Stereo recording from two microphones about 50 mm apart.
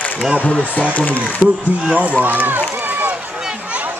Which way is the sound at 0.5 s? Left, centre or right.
Left.